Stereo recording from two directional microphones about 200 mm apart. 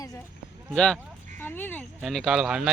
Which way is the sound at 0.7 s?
5° left (ahead or behind).